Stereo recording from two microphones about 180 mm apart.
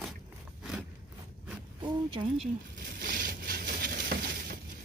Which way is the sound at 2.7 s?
50° right (ahead or behind).